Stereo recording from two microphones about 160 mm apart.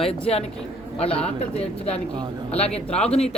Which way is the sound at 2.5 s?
40° left (ahead or behind).